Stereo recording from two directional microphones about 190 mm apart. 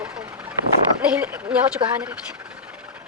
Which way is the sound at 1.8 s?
25° right (ahead or behind).